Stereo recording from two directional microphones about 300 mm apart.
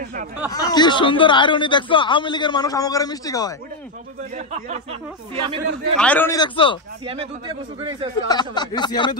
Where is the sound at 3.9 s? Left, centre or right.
Right.